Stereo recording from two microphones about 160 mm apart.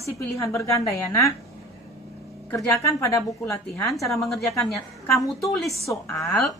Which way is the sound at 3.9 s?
Centre (ahead or behind).